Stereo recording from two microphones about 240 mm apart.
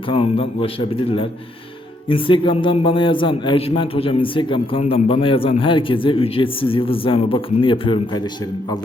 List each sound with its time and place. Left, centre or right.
0.1 s a man's voice: left
2.0 s a man's voice: left